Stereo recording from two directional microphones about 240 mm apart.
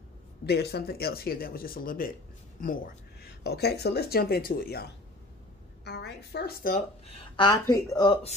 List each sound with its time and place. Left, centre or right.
0.5 s speech: left
7.3 s speech: centre